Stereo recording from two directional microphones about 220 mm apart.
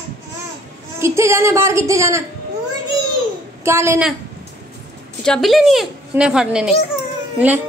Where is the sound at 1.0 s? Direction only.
10° right (ahead or behind).